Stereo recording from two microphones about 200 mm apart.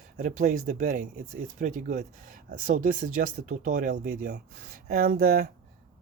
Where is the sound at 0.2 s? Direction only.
40° right (ahead or behind).